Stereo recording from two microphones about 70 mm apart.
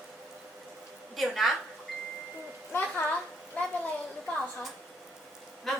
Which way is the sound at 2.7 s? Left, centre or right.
Left.